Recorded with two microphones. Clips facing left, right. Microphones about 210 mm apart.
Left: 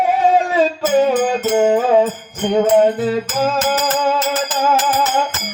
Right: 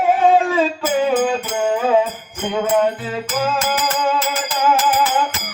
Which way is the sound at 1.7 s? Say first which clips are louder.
Right 1 dB; 45° left (ahead or behind).